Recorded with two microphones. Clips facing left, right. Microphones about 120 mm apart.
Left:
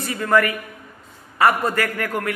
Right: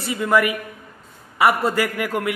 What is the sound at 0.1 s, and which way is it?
Speech, 15° right (ahead or behind).